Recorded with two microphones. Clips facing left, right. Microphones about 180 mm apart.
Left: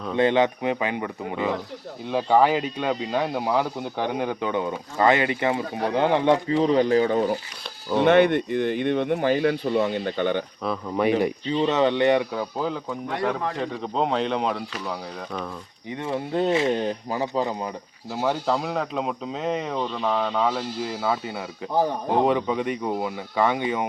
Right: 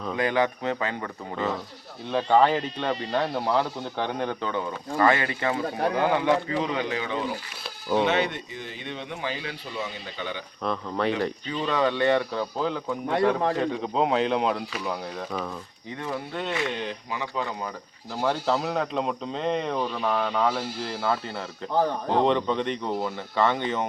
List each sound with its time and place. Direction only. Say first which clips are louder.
0.2 s speech: left 5 dB; 25° left (ahead or behind); by 7.2 s 45° left (ahead or behind)
8.0 s speech: left 8 dB; 55° left (ahead or behind)
10.6 s speech: right 2 dB; 5° left (ahead or behind)
11.4 s speech: left 3 dB; 25° left (ahead or behind); by 15.4 s 5° right (ahead or behind)
16.0 s speech: left 7 dB; 25° left (ahead or behind)
16.7 s speech: left 6 dB; 40° left (ahead or behind)
18.1 s speech: left 1 dB; 10° left (ahead or behind)